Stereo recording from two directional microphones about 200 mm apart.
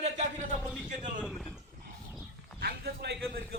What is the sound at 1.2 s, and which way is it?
Speech, centre (ahead or behind).